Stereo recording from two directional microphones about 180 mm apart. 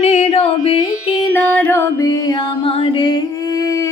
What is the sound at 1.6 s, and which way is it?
Music, 15° left (ahead or behind).